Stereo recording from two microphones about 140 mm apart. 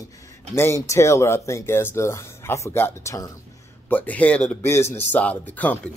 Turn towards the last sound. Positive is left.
turn(degrees=10)  # may be behind; listen again after turning